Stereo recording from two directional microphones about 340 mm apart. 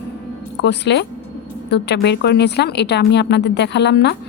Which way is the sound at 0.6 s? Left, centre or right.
Left.